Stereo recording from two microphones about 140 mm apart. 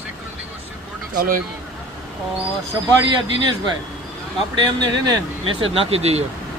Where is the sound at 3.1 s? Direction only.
30° right (ahead or behind).